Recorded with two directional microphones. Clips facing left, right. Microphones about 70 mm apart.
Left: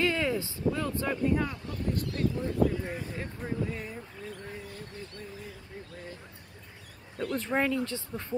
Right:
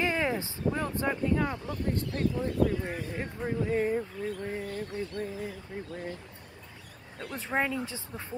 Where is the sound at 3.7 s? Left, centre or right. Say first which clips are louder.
Right 11 dB; right.